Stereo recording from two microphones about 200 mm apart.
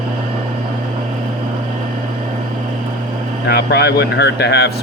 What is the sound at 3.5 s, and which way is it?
Speech, 55° left (ahead or behind).